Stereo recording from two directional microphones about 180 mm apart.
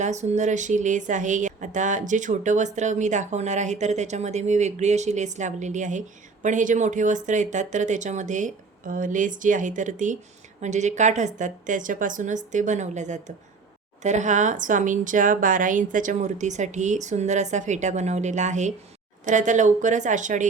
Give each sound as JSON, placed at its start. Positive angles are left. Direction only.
{"t": 0.0, "sound": "a woman's voice", "side_deg": -40}